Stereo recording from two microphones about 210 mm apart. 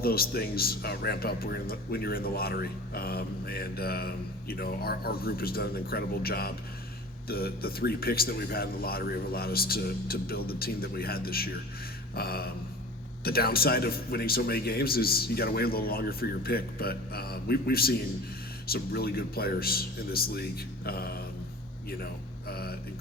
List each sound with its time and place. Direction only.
0.0 s speech: 45° left (ahead or behind)